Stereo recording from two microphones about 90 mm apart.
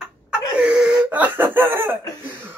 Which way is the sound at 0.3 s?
10° right (ahead or behind).